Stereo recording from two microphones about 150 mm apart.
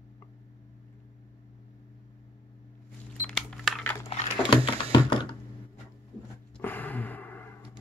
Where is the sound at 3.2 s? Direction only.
5° left (ahead or behind).